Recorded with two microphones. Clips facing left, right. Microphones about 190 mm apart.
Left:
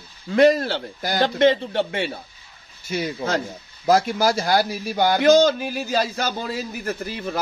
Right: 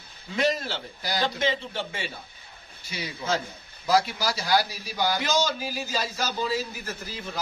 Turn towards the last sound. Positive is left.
turn(degrees=60)  # may be behind; listen again after turning